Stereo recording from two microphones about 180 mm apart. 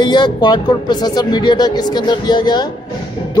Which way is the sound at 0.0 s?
25° left (ahead or behind).